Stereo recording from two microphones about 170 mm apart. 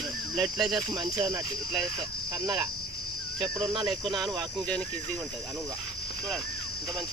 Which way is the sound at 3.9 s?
Centre (ahead or behind).